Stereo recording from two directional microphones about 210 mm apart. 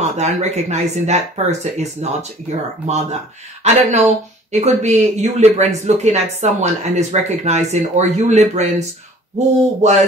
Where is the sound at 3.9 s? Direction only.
30° right (ahead or behind).